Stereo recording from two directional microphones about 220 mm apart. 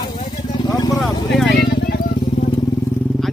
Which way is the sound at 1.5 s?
45° left (ahead or behind).